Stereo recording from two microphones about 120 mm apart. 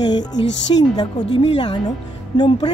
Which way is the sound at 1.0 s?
45° left (ahead or behind).